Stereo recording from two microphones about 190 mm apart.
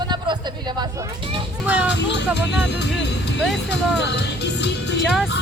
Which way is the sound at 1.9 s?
65° left (ahead or behind).